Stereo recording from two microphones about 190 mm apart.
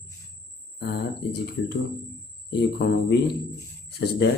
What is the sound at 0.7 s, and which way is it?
Speech, 60° left (ahead or behind).